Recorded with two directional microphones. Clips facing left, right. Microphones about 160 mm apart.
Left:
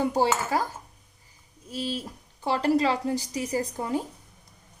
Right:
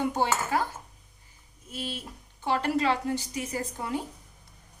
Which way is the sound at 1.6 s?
35° left (ahead or behind).